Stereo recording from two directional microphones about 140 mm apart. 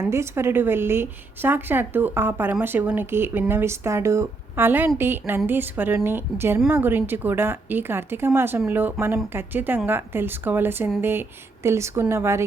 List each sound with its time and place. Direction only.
0.0 s a woman's voice: 20° right (ahead or behind)